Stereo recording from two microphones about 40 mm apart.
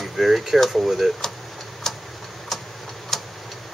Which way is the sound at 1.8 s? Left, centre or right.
Centre.